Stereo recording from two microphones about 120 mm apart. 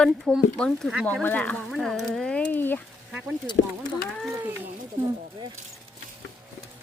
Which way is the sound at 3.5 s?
40° left (ahead or behind).